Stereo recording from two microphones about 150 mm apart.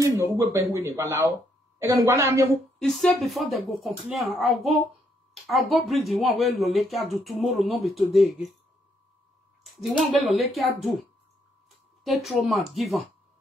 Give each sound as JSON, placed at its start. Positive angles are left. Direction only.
{"t": 0.0, "sound": "speech", "side_deg": -20}
{"t": 2.8, "sound": "speech", "side_deg": 0}
{"t": 9.7, "sound": "speech", "side_deg": 0}
{"t": 12.0, "sound": "speech", "side_deg": 0}